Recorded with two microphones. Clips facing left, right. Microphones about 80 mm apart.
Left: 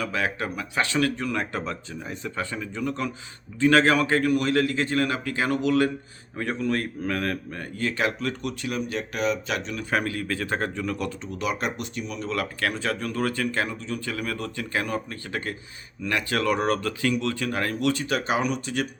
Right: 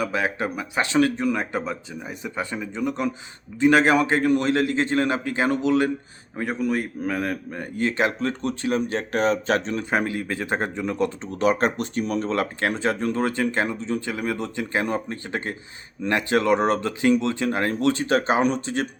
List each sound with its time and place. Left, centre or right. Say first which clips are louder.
0.0 s speech: right 3 dB; right
9.9 s speech: right 1 dB; right
11.3 s speech: right 7 dB; right